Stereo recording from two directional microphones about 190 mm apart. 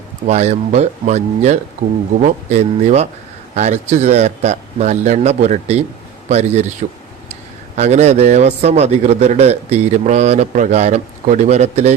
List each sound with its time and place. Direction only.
0.3 s a man's voice: 35° right (ahead or behind)
1.8 s speech: 50° right (ahead or behind)
2.2 s a man's voice: 40° right (ahead or behind)
7.8 s a man's voice: 35° right (ahead or behind)